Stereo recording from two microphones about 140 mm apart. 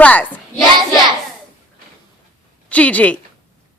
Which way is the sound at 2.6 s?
10° left (ahead or behind).